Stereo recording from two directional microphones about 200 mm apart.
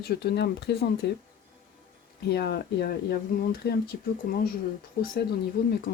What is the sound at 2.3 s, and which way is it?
Speech, 55° left (ahead or behind).